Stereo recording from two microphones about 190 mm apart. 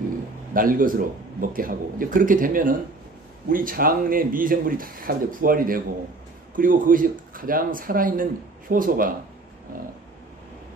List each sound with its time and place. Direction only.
0.5 s speech: 45° right (ahead or behind)